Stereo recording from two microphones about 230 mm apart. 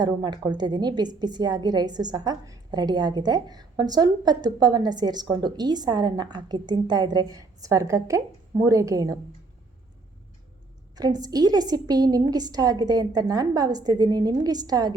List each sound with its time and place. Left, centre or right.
0.0 s a woman's voice: centre
10.9 s a woman's voice: centre